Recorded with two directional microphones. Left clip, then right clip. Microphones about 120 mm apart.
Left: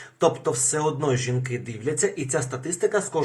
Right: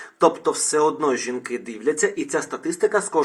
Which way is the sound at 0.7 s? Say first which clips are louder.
Right 8 dB; 5° left (ahead or behind).